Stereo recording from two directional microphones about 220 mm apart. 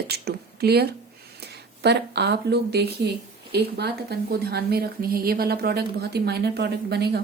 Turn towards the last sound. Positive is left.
turn(degrees=-50)  # may be behind; listen again after turning